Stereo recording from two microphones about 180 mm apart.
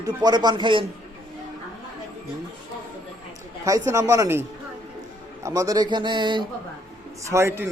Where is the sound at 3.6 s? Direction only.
20° right (ahead or behind).